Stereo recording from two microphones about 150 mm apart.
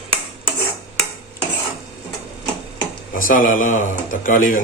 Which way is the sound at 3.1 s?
65° left (ahead or behind).